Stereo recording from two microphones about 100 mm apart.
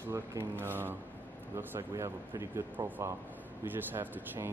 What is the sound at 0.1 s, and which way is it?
Speech, 25° right (ahead or behind).